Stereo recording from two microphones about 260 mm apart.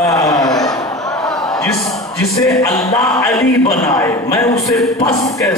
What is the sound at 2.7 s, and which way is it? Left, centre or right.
Speech, centre.